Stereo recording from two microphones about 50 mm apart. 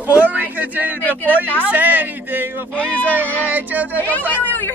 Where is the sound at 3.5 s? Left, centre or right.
Right.